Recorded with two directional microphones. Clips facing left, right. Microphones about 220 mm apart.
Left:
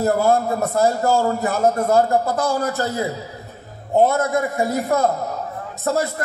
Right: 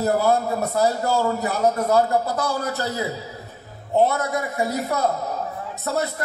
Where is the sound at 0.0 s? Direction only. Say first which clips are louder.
Left 2 dB; 50° left (ahead or behind).